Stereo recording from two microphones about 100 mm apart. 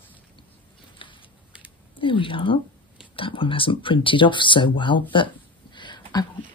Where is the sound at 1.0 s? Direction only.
60° left (ahead or behind).